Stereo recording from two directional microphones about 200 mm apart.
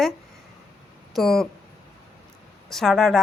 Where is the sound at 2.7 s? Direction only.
Centre (ahead or behind).